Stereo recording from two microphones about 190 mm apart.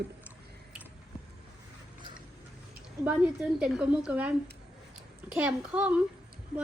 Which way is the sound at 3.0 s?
5° right (ahead or behind).